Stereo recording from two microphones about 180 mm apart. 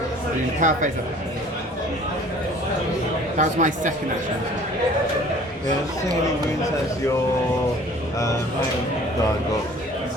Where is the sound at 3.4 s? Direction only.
45° right (ahead or behind).